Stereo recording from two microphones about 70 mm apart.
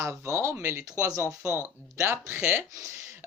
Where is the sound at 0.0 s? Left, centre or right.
Right.